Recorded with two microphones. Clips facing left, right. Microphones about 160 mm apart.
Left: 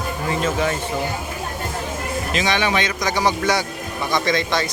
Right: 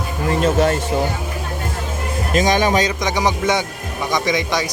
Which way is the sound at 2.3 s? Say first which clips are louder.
Right 5 dB; 45° right (ahead or behind).